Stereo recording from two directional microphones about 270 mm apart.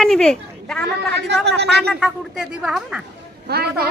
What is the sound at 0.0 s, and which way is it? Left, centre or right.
Speech, centre.